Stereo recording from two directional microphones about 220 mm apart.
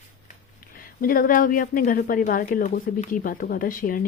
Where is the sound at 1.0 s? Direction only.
40° left (ahead or behind).